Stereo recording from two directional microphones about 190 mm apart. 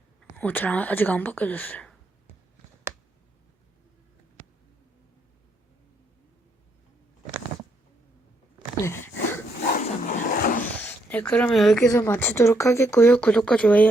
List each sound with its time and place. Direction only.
0.2 s a woman's voice: 10° left (ahead or behind)
9.7 s dog: 45° left (ahead or behind)
10.6 s a sound: 10° left (ahead or behind)
11.9 s speech: 15° left (ahead or behind)